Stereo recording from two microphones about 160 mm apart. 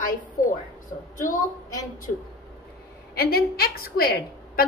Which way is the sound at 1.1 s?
55° left (ahead or behind).